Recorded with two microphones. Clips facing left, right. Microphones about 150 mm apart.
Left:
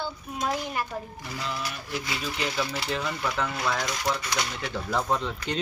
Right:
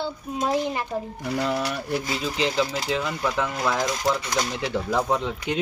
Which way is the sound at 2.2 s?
20° right (ahead or behind).